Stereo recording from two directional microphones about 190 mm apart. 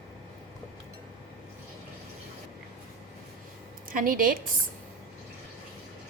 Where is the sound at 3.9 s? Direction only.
50° right (ahead or behind).